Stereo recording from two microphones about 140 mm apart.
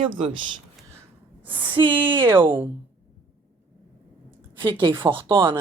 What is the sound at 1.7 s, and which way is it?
Speech, 35° right (ahead or behind).